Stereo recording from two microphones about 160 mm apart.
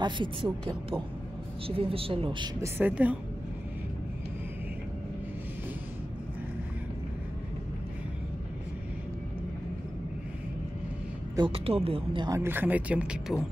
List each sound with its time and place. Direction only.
0.0 s speech: 30° right (ahead or behind)
2.6 s speech: 10° right (ahead or behind)
11.3 s speech: 35° right (ahead or behind)
12.4 s speech: 15° right (ahead or behind)